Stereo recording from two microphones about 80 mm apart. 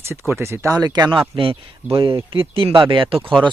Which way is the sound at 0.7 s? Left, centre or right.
Right.